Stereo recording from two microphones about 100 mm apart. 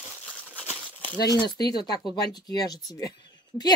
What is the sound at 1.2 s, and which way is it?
A woman's voice, 40° left (ahead or behind).